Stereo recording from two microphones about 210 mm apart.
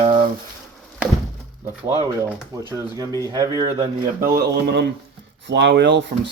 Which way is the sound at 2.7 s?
20° right (ahead or behind).